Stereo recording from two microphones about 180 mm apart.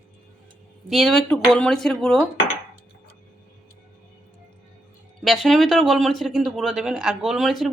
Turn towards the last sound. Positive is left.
turn(degrees=0)  # may be behind; listen again after turning